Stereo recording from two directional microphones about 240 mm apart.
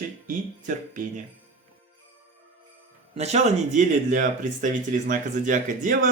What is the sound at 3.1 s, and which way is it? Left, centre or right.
Speech, right.